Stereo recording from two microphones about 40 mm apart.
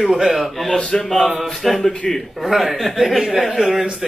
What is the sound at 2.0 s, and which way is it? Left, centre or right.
Speech, left.